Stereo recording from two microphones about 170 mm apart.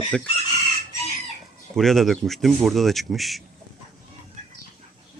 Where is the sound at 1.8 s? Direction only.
Centre (ahead or behind).